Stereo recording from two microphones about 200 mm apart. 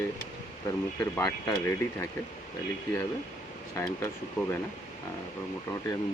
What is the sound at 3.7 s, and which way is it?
Speech, 15° left (ahead or behind).